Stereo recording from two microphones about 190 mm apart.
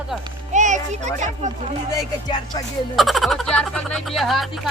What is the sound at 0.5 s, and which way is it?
Speech, 40° right (ahead or behind).